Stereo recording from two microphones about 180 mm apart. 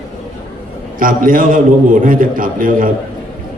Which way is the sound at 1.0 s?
50° right (ahead or behind).